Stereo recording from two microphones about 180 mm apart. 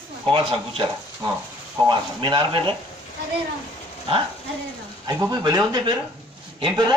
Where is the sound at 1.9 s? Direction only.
25° right (ahead or behind).